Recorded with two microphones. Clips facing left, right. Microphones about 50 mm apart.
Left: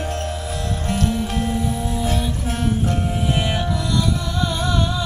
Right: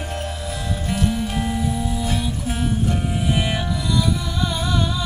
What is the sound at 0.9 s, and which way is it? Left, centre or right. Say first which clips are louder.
Music: left 1 dB; centre.